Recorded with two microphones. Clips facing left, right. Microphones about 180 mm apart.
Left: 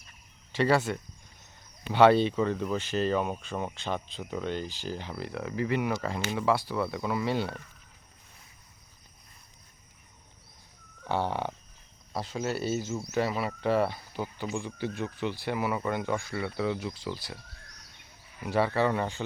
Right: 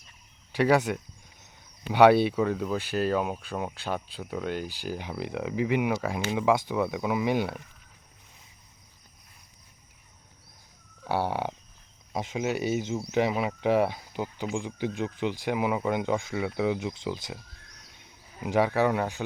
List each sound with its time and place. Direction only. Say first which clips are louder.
0.5 s speech: right 2 dB; 15° right (ahead or behind)
11.0 s speech: right 2 dB; 10° right (ahead or behind)
18.3 s speech: right 2 dB; 15° right (ahead or behind)